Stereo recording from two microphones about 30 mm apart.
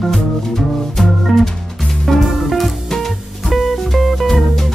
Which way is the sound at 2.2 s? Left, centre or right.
Centre.